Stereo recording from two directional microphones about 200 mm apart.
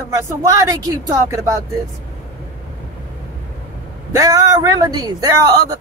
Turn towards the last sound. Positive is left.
turn(degrees=-15)  # may be behind; listen again after turning